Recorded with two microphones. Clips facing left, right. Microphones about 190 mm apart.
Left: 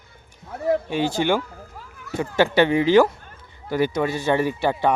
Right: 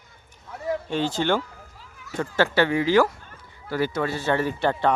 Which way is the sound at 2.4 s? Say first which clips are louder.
Left 3 dB; 20° left (ahead or behind).